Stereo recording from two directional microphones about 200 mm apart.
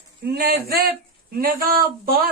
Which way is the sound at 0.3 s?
50° right (ahead or behind).